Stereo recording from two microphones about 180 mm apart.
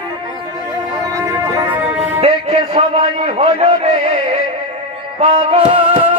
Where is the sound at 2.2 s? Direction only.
35° right (ahead or behind).